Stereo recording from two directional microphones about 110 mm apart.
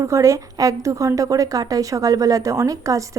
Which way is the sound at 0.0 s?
30° right (ahead or behind).